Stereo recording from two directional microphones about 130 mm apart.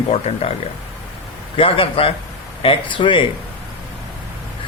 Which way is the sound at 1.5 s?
45° left (ahead or behind).